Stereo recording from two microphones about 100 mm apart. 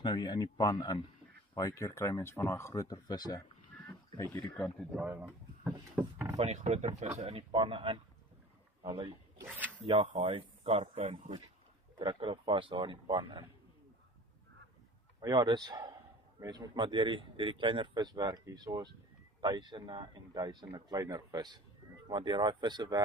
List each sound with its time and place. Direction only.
0.0 s speech: 50° left (ahead or behind)
3.3 s a sound: 20° left (ahead or behind)
4.9 s speech: 15° right (ahead or behind)
6.3 s speech: 90° right
7.5 s speech: 55° right (ahead or behind)
9.5 s zipper: 15° right (ahead or behind)
9.8 s speech: 75° right (ahead or behind)
12.0 s speech: 55° right (ahead or behind)
15.1 s speech: 50° right (ahead or behind)